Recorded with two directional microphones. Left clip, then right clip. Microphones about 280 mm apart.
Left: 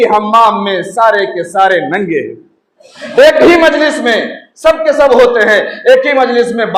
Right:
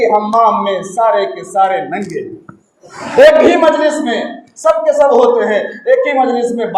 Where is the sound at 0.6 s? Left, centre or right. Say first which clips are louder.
Left 3 dB; left.